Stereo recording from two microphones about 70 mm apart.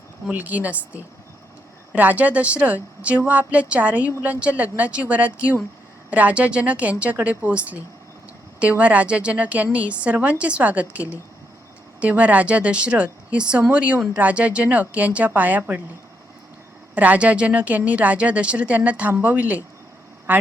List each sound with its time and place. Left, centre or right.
0.3 s speech: right
8.8 s speech: centre
16.9 s a man's voice: right